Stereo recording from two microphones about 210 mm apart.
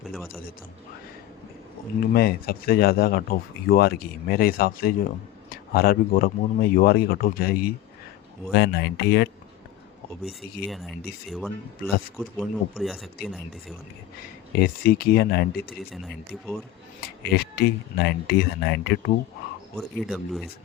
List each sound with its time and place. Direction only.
2.0 s speech: 45° left (ahead or behind)
10.2 s speech: centre (ahead or behind)
14.6 s speech: 45° left (ahead or behind)
17.3 s speech: 50° left (ahead or behind)
19.7 s speech: centre (ahead or behind)